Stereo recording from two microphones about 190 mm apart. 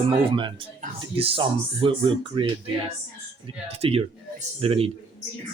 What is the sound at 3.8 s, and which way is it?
A man's voice, 30° right (ahead or behind).